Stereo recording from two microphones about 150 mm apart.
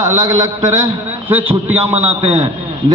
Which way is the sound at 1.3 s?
15° right (ahead or behind).